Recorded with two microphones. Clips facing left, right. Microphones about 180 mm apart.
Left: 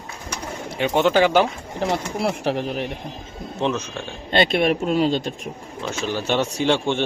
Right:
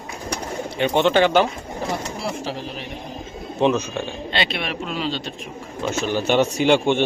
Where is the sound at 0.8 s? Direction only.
5° left (ahead or behind).